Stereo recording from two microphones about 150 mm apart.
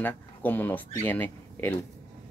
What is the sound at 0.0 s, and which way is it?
Speech, 10° left (ahead or behind).